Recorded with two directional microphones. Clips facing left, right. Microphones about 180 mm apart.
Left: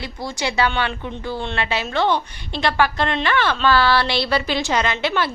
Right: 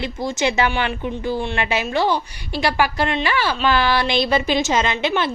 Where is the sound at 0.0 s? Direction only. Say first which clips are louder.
Right 5 dB; 20° right (ahead or behind).